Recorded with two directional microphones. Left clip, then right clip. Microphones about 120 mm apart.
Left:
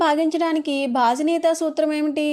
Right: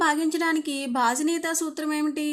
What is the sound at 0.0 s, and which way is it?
A woman's voice, 40° left (ahead or behind).